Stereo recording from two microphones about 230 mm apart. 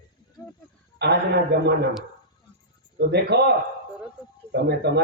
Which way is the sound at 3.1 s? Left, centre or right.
Right.